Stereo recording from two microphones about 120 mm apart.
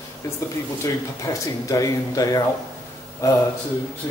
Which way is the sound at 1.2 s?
25° left (ahead or behind).